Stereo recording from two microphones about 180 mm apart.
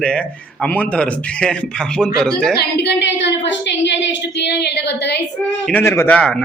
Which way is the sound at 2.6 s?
70° left (ahead or behind).